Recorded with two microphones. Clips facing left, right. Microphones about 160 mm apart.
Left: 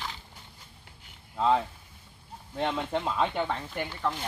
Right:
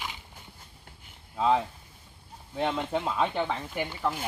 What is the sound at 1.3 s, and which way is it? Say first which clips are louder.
Speech: even; 5° right (ahead or behind).